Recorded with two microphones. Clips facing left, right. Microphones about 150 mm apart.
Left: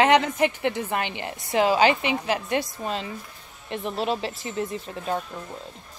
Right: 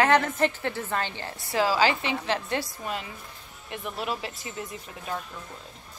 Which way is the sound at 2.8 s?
25° left (ahead or behind).